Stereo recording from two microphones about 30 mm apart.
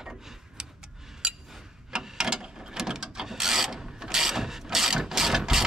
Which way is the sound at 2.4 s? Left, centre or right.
Right.